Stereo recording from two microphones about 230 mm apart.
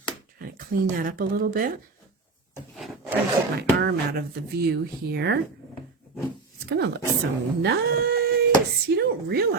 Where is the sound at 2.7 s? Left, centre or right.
Centre.